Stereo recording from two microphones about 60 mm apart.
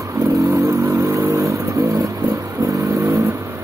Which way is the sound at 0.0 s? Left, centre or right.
Right.